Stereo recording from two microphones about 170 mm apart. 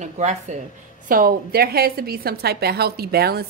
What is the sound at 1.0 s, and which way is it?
A woman's voice, 55° right (ahead or behind).